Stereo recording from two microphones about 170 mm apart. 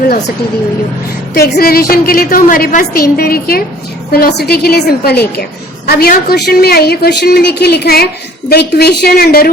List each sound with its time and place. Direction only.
1.3 s a woman's voice: 65° left (ahead or behind)